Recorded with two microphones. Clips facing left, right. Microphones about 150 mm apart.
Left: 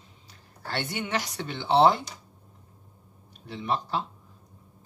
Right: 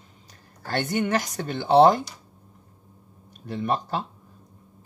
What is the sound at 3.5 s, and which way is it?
Speech, 50° right (ahead or behind).